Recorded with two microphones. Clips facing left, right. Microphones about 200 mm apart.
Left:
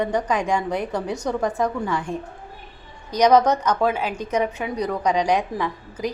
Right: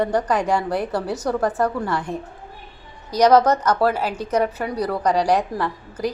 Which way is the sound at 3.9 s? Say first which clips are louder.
Right 1 dB; 40° right (ahead or behind).